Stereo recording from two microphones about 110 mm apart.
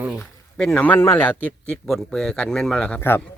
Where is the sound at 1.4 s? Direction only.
5° left (ahead or behind).